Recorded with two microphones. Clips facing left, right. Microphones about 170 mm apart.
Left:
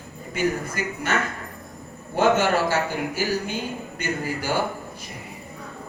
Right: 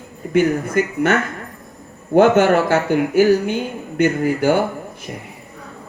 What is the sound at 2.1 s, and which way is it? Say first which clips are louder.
Speech: right 8 dB; 60° right (ahead or behind).